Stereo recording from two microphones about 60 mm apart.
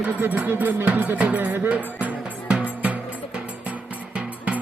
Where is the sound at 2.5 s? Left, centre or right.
Centre.